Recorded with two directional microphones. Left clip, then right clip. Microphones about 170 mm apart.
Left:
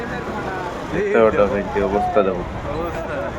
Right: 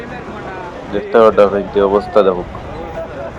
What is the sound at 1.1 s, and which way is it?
Speech, 20° right (ahead or behind).